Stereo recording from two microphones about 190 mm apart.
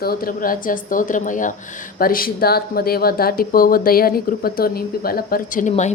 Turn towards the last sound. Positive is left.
turn(degrees=40)  # may be behind; listen again after turning